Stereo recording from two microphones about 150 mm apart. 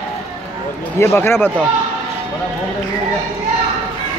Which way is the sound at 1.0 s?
15° left (ahead or behind).